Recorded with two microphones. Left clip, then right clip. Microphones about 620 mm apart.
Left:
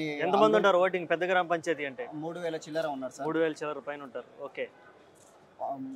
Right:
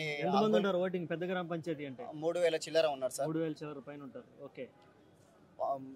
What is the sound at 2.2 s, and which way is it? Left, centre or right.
A man's voice, right.